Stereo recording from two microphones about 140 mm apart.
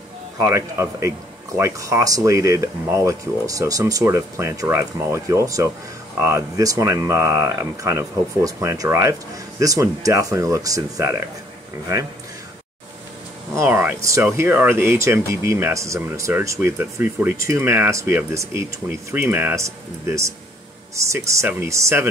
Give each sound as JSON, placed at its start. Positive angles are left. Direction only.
{"t": 0.4, "sound": "speech", "side_deg": -20}
{"t": 13.6, "sound": "speech", "side_deg": -15}